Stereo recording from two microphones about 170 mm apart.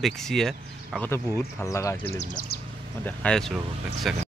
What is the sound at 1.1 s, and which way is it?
Speech, 15° left (ahead or behind).